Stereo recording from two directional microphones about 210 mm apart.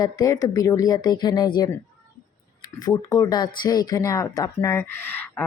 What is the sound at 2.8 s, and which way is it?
A woman's voice, 15° left (ahead or behind).